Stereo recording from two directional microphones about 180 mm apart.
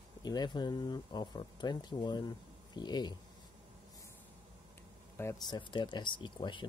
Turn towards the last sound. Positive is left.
turn(degrees=25)  # may be behind; listen again after turning